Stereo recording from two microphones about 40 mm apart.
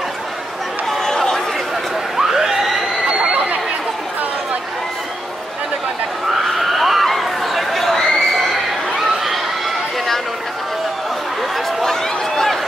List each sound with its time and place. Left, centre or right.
0.8 s chatter: centre
2.1 s a sound: centre
3.1 s chatter: right
6.3 s neigh: centre
8.1 s crowd: centre
11.8 s a sound: centre